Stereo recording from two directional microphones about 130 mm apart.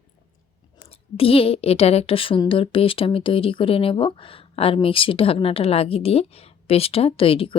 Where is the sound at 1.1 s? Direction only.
45° left (ahead or behind).